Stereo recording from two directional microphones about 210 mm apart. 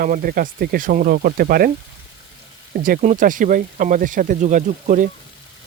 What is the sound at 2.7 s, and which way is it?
Speech, 40° right (ahead or behind).